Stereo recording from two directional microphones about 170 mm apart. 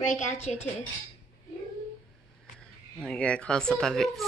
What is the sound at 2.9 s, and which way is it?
A woman's voice, 5° left (ahead or behind).